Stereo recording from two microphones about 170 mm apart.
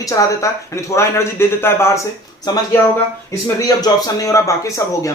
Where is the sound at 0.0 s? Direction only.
20° left (ahead or behind).